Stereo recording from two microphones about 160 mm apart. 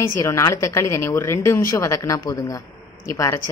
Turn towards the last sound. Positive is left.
turn(degrees=20)  # may be behind; listen again after turning